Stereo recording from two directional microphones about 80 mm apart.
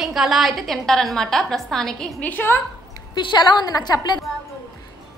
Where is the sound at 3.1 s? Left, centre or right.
Left.